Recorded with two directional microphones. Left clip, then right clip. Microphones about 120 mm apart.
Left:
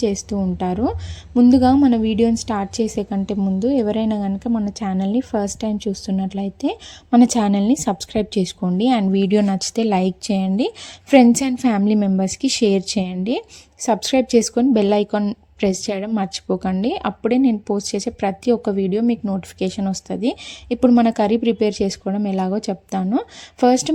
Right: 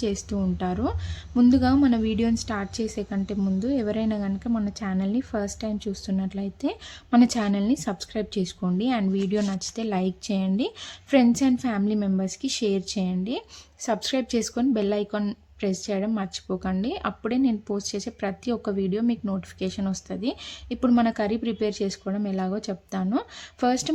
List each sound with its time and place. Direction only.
0.0 s a woman's voice: 30° left (ahead or behind)
11.2 s speech: 50° left (ahead or behind)
13.8 s speech: 40° left (ahead or behind)